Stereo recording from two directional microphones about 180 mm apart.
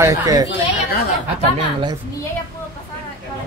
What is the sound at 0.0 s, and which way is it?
Speech, 20° right (ahead or behind).